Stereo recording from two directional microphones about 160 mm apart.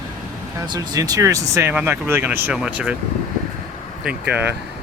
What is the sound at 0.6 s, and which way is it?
Speech, 25° right (ahead or behind).